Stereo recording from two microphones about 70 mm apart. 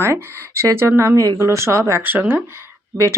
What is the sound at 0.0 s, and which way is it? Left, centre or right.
Speech, right.